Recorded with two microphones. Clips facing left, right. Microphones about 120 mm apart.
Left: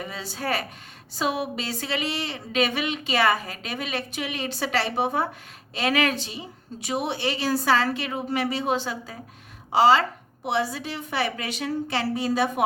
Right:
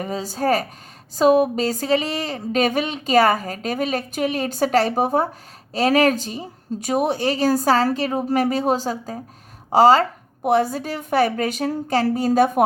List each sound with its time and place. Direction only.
0.0 s a woman's voice: 40° right (ahead or behind)